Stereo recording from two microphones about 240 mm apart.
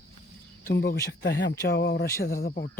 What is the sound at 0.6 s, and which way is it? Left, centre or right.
Speech, left.